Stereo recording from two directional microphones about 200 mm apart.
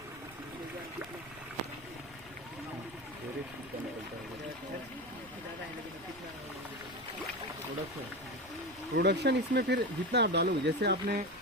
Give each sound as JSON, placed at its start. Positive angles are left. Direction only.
{"t": 9.0, "sound": "speech", "side_deg": -55}